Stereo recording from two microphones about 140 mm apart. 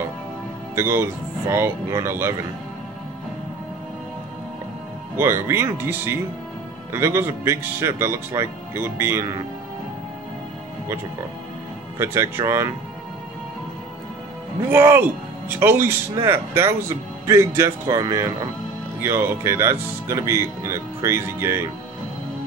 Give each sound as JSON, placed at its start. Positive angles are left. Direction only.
{"t": 0.7, "sound": "speech", "side_deg": -15}
{"t": 5.1, "sound": "speech", "side_deg": -15}
{"t": 12.0, "sound": "speech", "side_deg": -15}
{"t": 14.7, "sound": "speech", "side_deg": -15}